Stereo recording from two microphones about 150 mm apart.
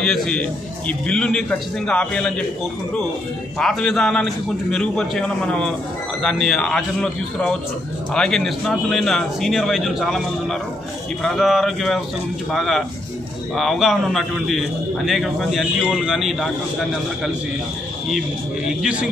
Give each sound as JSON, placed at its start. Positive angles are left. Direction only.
{"t": 0.0, "sound": "a man's voice", "side_deg": 5}
{"t": 3.5, "sound": "a man's voice", "side_deg": 5}
{"t": 18.8, "sound": "a man's voice", "side_deg": -5}